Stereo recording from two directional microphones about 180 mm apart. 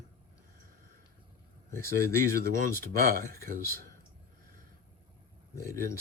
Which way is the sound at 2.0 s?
55° right (ahead or behind).